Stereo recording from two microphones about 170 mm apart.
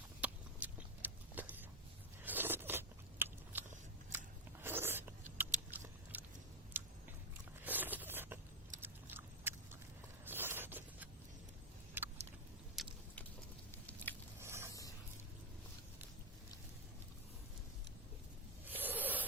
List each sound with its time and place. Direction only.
0.2 s a sound: 10° right (ahead or behind)
2.2 s biting: 10° right (ahead or behind)
4.6 s a sound: 15° right (ahead or behind)
5.7 s biting: 10° right (ahead or behind)
7.6 s zipper: 10° right (ahead or behind)
8.8 s biting: 10° right (ahead or behind)
10.2 s zipper: 10° right (ahead or behind)
12.0 s vehicle: 15° right (ahead or behind)
12.7 s biting: centre (ahead or behind)
14.3 s mechanisms: 15° right (ahead or behind)
14.7 s vehicle: 20° left (ahead or behind)
18.7 s a sound: 10° right (ahead or behind)